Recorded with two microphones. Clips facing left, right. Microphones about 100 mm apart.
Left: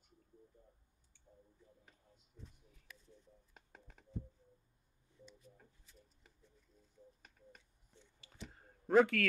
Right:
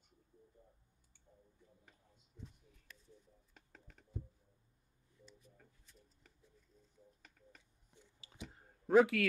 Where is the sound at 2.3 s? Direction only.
Centre (ahead or behind).